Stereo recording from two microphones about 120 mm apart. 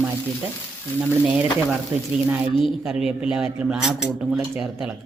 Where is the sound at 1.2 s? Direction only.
10° right (ahead or behind).